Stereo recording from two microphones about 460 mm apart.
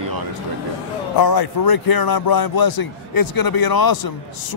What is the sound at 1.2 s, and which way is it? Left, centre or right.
Speech, left.